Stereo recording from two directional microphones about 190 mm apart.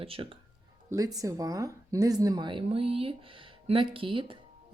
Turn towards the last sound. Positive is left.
turn(degrees=-25)  # may be behind; listen again after turning